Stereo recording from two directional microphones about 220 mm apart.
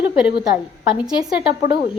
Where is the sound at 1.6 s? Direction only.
45° left (ahead or behind).